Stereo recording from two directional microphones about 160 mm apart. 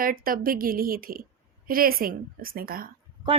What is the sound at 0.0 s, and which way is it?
A woman's voice, 65° right (ahead or behind).